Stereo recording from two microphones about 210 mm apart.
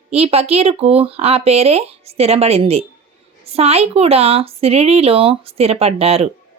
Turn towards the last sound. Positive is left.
turn(degrees=-30)  # may be behind; listen again after turning